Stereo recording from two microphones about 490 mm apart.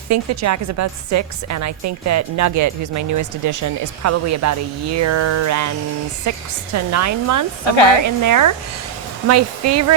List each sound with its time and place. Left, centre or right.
0.1 s a woman's voice: right